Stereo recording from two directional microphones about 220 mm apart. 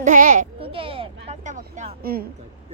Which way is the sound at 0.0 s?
40° right (ahead or behind).